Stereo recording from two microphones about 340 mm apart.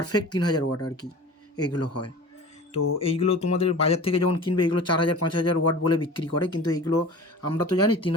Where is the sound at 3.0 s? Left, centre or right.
Centre.